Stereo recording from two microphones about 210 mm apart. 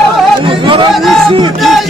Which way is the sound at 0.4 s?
25° right (ahead or behind).